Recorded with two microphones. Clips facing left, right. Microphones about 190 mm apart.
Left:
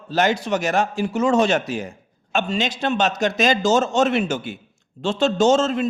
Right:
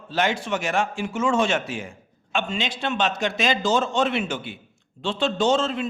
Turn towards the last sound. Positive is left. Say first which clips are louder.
# left 5 dB
turn(degrees=45)  # may be behind; listen again after turning